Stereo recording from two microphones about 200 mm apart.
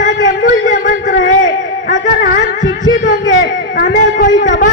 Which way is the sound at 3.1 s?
70° left (ahead or behind).